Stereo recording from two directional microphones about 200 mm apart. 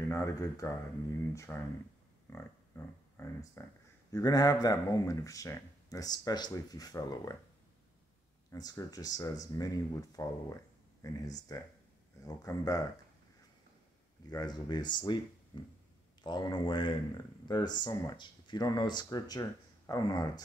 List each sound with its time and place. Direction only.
0.1 s speech: 15° left (ahead or behind)
8.5 s speech: 20° left (ahead or behind)
14.3 s speech: 20° left (ahead or behind)